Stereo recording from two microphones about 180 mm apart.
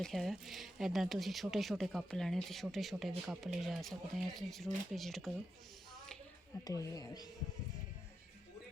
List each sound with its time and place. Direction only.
0.0 s speech: centre (ahead or behind)
6.7 s speech: 20° left (ahead or behind)